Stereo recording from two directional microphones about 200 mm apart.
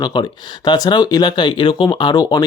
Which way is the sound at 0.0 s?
25° left (ahead or behind).